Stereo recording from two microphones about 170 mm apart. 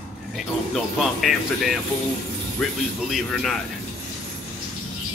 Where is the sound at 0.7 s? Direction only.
Centre (ahead or behind).